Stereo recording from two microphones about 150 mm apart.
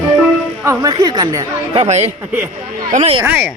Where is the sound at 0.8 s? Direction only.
30° right (ahead or behind).